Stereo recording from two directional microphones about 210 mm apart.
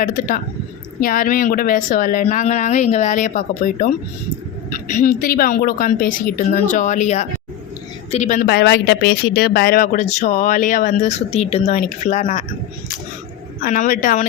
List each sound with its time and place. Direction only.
0.0 s speech: 40° left (ahead or behind)
8.4 s speech: 50° left (ahead or behind)
13.6 s speech: 40° left (ahead or behind)